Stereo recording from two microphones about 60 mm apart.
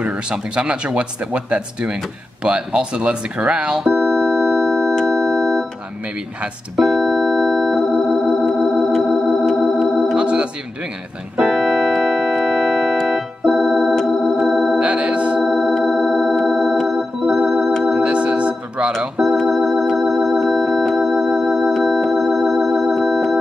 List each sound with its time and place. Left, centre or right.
0.3 s speech: centre
3.7 s keyboard: centre
6.8 s organ: centre
8.3 s music: centre
10.1 s organ: centre
11.4 s keyboard: centre
13.5 s organ: centre
14.8 s music: centre
15.4 s organ: centre
18.0 s organ: right
19.3 s organ: centre